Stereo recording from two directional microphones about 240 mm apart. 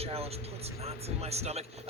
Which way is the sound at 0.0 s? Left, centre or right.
Right.